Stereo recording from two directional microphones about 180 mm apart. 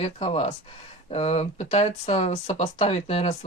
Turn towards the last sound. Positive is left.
turn(degrees=35)  # may be behind; listen again after turning